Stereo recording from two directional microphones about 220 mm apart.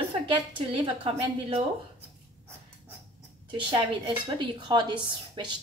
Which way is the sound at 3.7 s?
20° right (ahead or behind).